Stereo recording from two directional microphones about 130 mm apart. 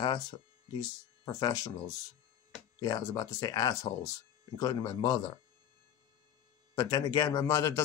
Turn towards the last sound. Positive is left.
turn(degrees=25)  # may be behind; listen again after turning